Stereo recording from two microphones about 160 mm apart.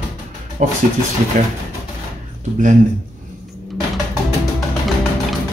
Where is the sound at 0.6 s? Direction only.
50° right (ahead or behind).